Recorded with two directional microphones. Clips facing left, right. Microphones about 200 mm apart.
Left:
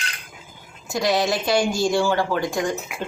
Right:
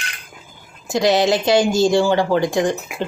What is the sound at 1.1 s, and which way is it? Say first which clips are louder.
Speech: right 5 dB; 25° right (ahead or behind).